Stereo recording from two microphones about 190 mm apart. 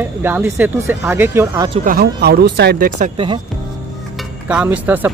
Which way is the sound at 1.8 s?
50° right (ahead or behind).